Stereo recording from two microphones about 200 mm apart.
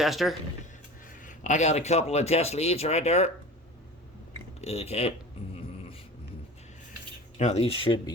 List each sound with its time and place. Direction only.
0.0 s speech: centre (ahead or behind)
1.2 s speech: 40° left (ahead or behind)
4.6 s speech: 30° left (ahead or behind)
7.3 s speech: 35° left (ahead or behind)